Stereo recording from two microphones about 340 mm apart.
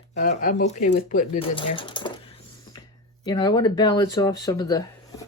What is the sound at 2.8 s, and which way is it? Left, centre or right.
Speech, centre.